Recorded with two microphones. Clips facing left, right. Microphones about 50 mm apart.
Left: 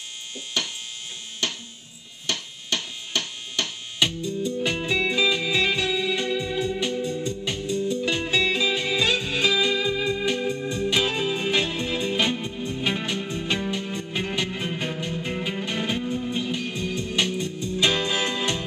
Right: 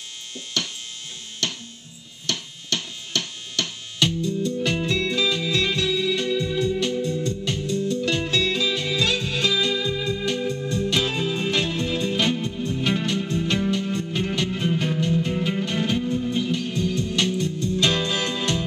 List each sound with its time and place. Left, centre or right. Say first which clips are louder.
0.6 s electric shaver: even; centre
1.4 s music: even; centre
2.2 s a sound: even; centre
4.6 s music: left 2 dB; centre